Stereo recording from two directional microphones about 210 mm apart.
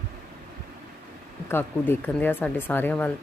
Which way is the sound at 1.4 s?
10° left (ahead or behind).